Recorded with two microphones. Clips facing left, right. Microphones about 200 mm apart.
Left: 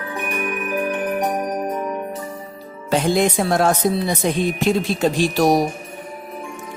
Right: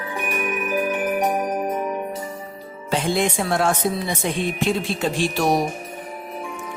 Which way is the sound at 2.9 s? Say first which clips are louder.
Left 4 dB; 40° left (ahead or behind).